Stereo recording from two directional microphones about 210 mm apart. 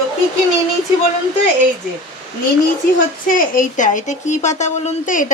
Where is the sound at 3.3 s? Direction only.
40° left (ahead or behind).